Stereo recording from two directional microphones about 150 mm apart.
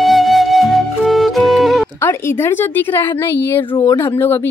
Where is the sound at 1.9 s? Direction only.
15° left (ahead or behind).